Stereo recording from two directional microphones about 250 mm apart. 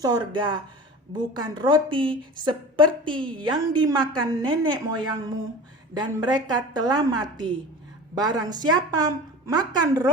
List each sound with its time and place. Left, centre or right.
0.0 s a woman's voice: centre